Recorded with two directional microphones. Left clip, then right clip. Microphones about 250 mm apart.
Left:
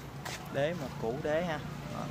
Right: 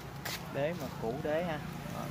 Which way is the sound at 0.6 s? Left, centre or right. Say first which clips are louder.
Left 3 dB; centre.